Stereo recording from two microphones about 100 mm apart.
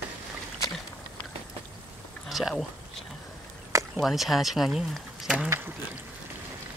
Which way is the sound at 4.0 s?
Centre (ahead or behind).